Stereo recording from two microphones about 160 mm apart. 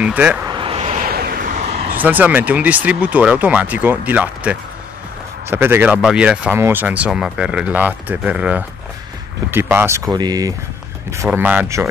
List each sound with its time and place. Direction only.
0.0 s speech: 10° right (ahead or behind)
0.5 s vehicle: 35° right (ahead or behind)
1.0 s a sound: 70° right (ahead or behind); by 1.9 s 45° right (ahead or behind)
2.0 s speech: 10° right (ahead or behind)